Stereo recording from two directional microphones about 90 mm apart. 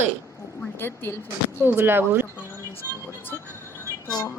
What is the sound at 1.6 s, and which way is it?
Speech, 25° right (ahead or behind).